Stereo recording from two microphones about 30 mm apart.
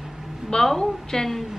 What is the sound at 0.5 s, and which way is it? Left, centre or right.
Speech, left.